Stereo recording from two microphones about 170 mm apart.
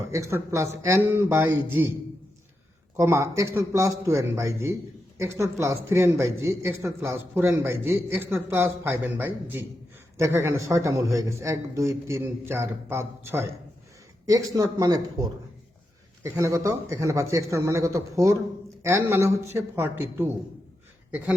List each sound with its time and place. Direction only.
0.1 s a man's voice: 15° right (ahead or behind)
2.9 s a man's voice: 15° right (ahead or behind)